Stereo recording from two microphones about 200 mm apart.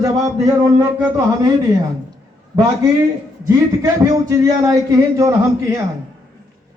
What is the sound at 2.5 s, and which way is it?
Speech, 20° right (ahead or behind).